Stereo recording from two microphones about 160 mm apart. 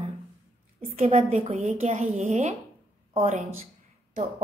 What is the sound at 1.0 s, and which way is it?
A woman's voice, 45° right (ahead or behind).